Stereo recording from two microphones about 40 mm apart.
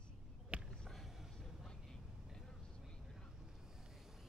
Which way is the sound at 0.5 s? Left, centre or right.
Right.